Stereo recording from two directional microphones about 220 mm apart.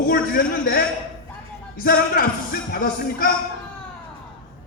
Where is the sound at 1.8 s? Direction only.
45° left (ahead or behind).